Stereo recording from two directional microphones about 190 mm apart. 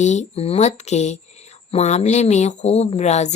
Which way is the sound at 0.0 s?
35° left (ahead or behind).